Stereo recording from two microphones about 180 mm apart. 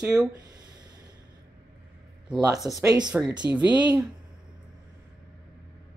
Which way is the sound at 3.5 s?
10° right (ahead or behind).